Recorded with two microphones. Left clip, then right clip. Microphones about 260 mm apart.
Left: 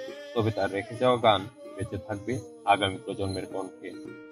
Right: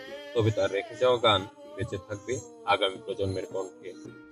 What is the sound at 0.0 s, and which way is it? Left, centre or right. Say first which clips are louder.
A man's voice: right 1 dB; left.